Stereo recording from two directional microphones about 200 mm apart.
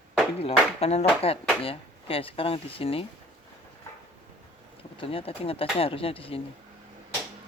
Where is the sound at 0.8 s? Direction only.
30° left (ahead or behind).